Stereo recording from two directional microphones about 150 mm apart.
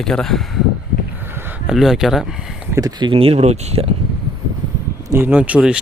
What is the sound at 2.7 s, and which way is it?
Speech, 25° right (ahead or behind).